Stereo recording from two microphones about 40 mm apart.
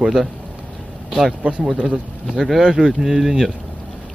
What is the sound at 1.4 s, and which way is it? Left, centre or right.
Speech, right.